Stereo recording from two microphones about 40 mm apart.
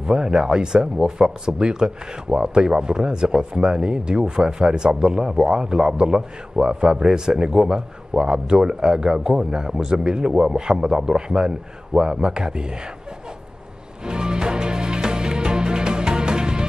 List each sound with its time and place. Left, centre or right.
0.0 s a man's voice: centre
14.0 s music: right